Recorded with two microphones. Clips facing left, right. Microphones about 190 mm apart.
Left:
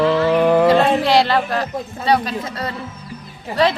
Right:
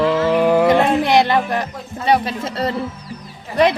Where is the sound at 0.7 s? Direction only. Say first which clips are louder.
Even; 20° right (ahead or behind).